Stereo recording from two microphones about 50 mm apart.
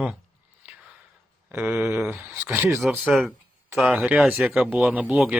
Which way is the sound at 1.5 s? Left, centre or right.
Right.